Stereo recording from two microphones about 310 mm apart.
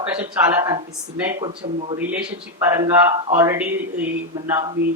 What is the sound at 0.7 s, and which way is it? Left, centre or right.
Speech, centre.